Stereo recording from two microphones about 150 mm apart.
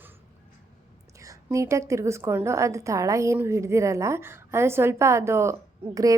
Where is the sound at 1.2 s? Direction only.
20° right (ahead or behind).